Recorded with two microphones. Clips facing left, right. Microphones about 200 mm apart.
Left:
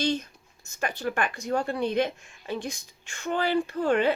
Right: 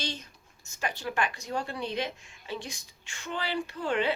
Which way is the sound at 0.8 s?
55° left (ahead or behind).